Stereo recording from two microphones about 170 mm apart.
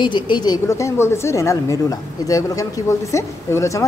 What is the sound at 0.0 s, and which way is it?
A woman's voice, 25° left (ahead or behind).